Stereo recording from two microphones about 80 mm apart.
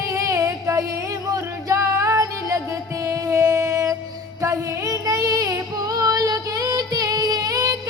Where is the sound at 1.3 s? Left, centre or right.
Right.